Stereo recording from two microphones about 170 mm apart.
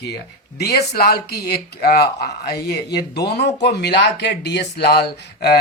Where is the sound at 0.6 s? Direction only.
70° left (ahead or behind).